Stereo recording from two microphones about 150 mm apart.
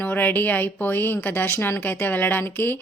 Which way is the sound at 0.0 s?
10° left (ahead or behind).